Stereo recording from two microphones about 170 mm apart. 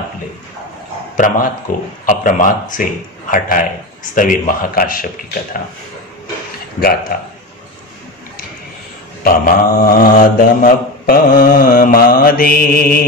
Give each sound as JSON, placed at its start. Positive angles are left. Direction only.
{"t": 1.1, "sound": "speech", "side_deg": 50}
{"t": 6.8, "sound": "speech", "side_deg": 60}
{"t": 9.2, "sound": "speech", "side_deg": 55}